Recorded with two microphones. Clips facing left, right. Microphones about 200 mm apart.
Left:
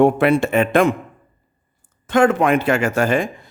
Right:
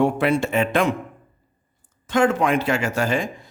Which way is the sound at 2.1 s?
55° left (ahead or behind).